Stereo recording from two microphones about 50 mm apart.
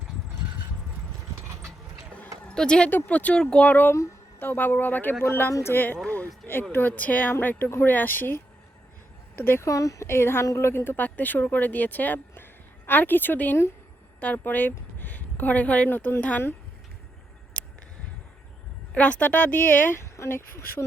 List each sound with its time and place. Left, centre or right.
2.6 s speech: centre
3.1 s speech: left
3.3 s speech: left
3.7 s speech: left
5.5 s speech: left
5.7 s speech: left
9.6 s speech: left
10.2 s speech: left
11.0 s speech: left
17.5 s a sound: left
18.9 s speech: left
20.0 s speech: left